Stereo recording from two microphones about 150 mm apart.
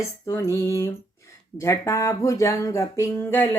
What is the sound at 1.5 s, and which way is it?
Music, 20° left (ahead or behind).